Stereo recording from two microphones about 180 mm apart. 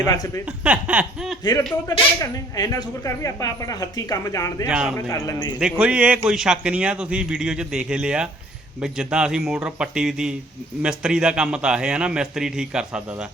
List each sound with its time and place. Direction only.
0.0 s speech: 20° left (ahead or behind)
0.6 s a sound: 5° right (ahead or behind)
1.9 s speech: 20° left (ahead or behind)
4.7 s a man's voice: 5° right (ahead or behind)
4.9 s a man's voice: 20° left (ahead or behind)
5.5 s a man's voice: 5° right (ahead or behind)